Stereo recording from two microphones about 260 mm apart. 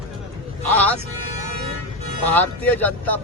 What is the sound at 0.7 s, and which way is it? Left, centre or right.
Speech, centre.